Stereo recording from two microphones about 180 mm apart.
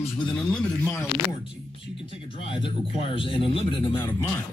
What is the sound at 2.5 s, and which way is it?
Speech, 30° left (ahead or behind).